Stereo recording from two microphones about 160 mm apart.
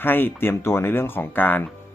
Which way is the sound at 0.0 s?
10° left (ahead or behind).